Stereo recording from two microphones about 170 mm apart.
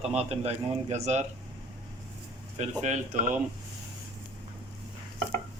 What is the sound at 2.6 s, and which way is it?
Speech, 45° right (ahead or behind).